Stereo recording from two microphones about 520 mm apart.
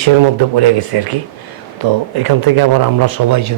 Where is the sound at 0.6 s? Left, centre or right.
Right.